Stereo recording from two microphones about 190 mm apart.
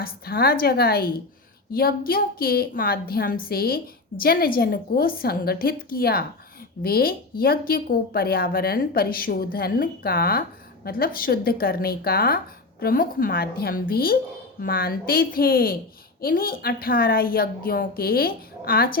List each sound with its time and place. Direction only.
0.0 s speech: 50° left (ahead or behind)